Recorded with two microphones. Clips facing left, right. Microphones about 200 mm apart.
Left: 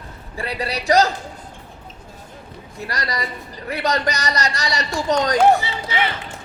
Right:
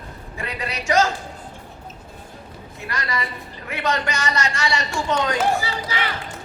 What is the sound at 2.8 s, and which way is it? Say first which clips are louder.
A man's voice: left 1 dB; 35° left (ahead or behind).